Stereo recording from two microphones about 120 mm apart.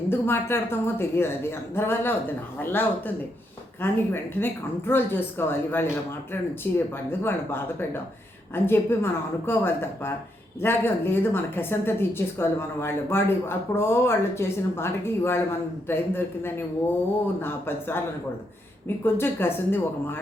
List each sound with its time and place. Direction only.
0.1 s a woman's voice: 20° left (ahead or behind)
19.0 s a woman's voice: 20° left (ahead or behind)